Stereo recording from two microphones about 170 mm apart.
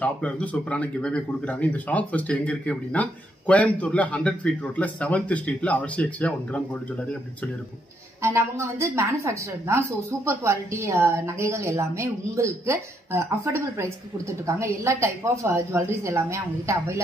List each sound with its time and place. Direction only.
0.0 s speech: 10° left (ahead or behind)
8.2 s speech: 15° right (ahead or behind)